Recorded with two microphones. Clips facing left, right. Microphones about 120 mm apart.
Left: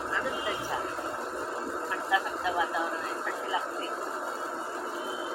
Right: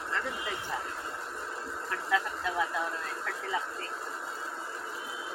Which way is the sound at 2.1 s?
15° left (ahead or behind).